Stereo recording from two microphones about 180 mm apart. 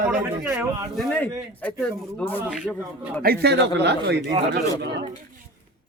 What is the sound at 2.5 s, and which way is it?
Speech, centre (ahead or behind).